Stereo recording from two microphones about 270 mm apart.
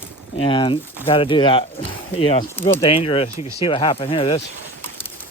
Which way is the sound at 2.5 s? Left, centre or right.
Centre.